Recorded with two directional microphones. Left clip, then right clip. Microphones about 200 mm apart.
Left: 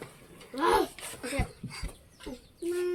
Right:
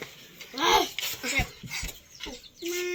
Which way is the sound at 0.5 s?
5° left (ahead or behind).